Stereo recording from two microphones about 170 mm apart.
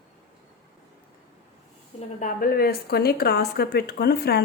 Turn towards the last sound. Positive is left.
turn(degrees=70)  # may be behind; listen again after turning